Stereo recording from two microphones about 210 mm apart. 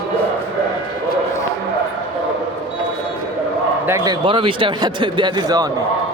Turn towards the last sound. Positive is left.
turn(degrees=-15)  # may be behind; listen again after turning